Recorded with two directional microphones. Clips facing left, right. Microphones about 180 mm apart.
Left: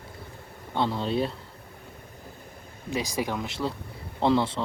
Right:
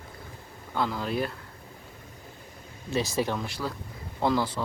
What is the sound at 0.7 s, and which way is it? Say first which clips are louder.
Speech: left 2 dB; 30° left (ahead or behind).